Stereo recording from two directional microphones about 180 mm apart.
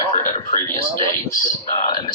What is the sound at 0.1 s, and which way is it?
Radio, 45° left (ahead or behind).